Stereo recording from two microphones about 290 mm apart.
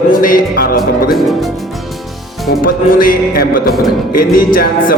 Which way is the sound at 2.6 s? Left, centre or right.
Left.